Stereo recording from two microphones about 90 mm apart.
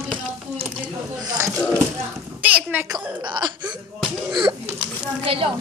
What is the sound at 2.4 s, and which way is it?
Speech, 15° right (ahead or behind).